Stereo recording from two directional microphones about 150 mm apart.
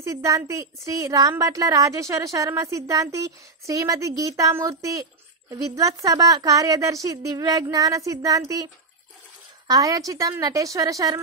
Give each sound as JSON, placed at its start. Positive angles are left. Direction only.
{"t": 0.0, "sound": "a woman's voice", "side_deg": -20}
{"t": 9.7, "sound": "a woman's voice", "side_deg": -25}